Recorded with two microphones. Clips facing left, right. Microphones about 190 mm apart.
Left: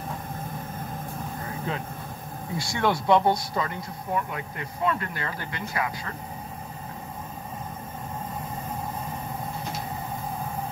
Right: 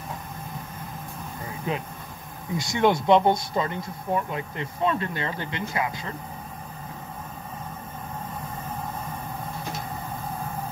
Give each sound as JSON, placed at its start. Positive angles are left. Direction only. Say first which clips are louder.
{"t": 1.7, "sound": "speech", "louder": "right 5 dB", "side_deg": -15}